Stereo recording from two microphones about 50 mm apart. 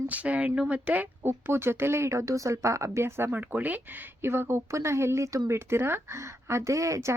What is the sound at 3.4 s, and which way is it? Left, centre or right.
Speech, right.